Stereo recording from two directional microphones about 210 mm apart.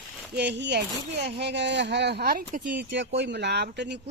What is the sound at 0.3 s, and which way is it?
Speech, 55° right (ahead or behind).